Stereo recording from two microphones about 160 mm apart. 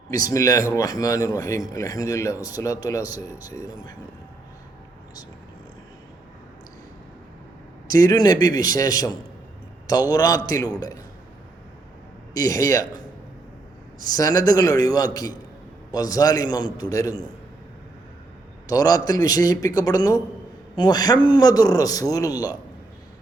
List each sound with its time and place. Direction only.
0.1 s speech: 20° left (ahead or behind)
7.9 s speech: 25° left (ahead or behind)
12.3 s speech: 20° left (ahead or behind)
14.2 s speech: 25° left (ahead or behind)
18.7 s speech: 25° left (ahead or behind)